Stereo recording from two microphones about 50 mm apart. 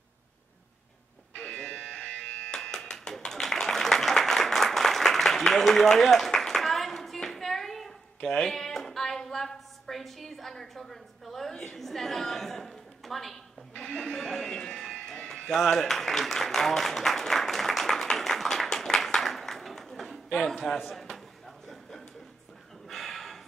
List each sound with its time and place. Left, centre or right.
1.4 s music: left
2.7 s a sound: centre
8.3 s a woman's voice: centre
13.8 s speech: left
14.1 s speech: centre
14.6 s a sound: centre
18.9 s clapping: centre
20.5 s a man's voice: centre
22.8 s a sound: centre